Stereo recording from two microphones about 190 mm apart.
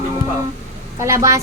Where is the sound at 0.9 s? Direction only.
15° right (ahead or behind).